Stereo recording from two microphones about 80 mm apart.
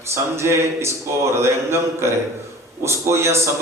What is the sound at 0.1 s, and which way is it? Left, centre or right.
A man's voice, right.